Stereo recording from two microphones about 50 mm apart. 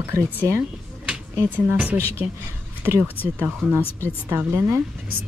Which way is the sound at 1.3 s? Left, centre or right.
Right.